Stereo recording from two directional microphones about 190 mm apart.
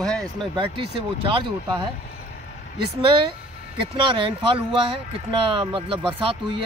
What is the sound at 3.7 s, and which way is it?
Speech, 25° right (ahead or behind).